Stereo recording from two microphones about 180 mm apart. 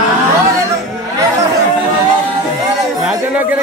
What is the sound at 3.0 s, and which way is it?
Speech, 5° right (ahead or behind).